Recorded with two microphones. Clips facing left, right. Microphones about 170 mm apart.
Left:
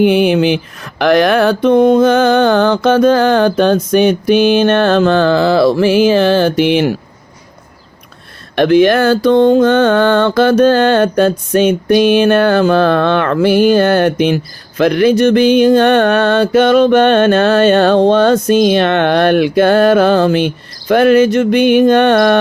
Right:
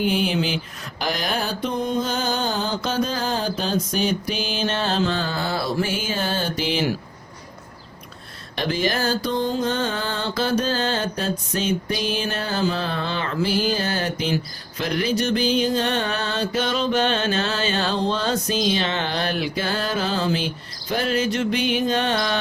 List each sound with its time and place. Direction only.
0.0 s mantra: 65° left (ahead or behind)
3.5 s music: 65° left (ahead or behind)
8.5 s music: 65° left (ahead or behind)
21.2 s music: 55° left (ahead or behind)